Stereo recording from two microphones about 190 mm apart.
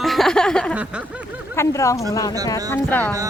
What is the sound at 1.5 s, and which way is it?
Speech, 15° left (ahead or behind).